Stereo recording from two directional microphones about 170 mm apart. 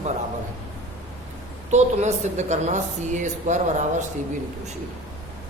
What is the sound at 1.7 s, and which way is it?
A woman's voice, 40° right (ahead or behind).